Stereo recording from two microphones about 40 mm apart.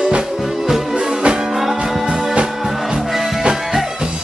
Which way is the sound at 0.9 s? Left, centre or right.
Right.